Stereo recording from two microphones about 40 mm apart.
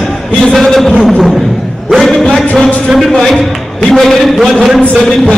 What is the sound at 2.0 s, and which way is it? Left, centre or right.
Music, centre.